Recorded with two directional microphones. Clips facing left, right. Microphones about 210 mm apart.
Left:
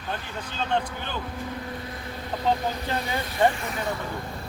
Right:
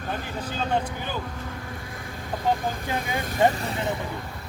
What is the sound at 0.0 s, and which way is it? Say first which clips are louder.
Speech: right 3 dB; 40° right (ahead or behind).